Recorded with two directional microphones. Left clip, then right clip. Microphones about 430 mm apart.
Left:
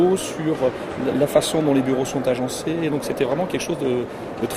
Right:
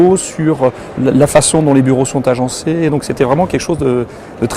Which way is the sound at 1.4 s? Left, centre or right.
Right.